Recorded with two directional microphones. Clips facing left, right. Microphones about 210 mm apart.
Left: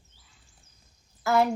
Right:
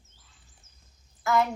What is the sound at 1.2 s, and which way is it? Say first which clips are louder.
Speech: left 2 dB; 30° left (ahead or behind).